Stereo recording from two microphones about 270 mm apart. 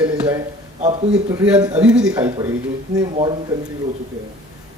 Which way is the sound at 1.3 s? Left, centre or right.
Centre.